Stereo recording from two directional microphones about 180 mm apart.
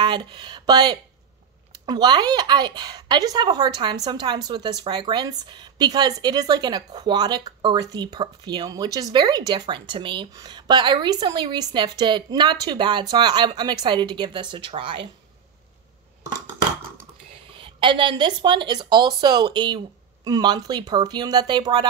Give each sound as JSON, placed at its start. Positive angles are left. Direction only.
{"t": 0.0, "sound": "a woman's voice", "side_deg": -25}
{"t": 17.3, "sound": "a woman's voice", "side_deg": -30}